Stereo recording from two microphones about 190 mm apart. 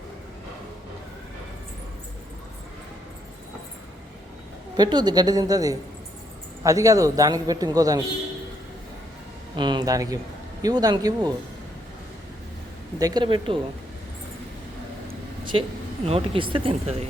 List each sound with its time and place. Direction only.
4.8 s a man's voice: 20° right (ahead or behind)
9.6 s a man's voice: 25° right (ahead or behind)
13.0 s a man's voice: 20° right (ahead or behind)
16.0 s speech: 30° right (ahead or behind)